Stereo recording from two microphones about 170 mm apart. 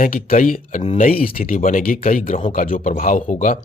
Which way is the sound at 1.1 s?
60° left (ahead or behind).